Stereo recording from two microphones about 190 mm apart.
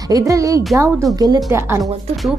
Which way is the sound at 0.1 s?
15° right (ahead or behind).